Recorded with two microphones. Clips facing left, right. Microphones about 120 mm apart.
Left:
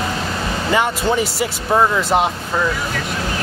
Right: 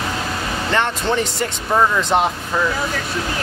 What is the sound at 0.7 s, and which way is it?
Speech, 10° left (ahead or behind).